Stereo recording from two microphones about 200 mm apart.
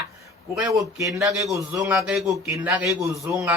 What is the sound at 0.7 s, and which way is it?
A man's voice, 15° right (ahead or behind).